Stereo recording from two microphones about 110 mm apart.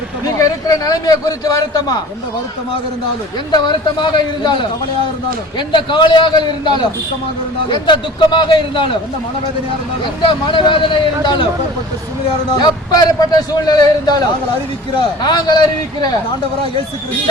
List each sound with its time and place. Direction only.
0.3 s a man's voice: 35° left (ahead or behind)
3.5 s a man's voice: 45° left (ahead or behind)
5.5 s a man's voice: 45° left (ahead or behind)
10.2 s a man's voice: 50° left (ahead or behind)
12.5 s a man's voice: 40° left (ahead or behind)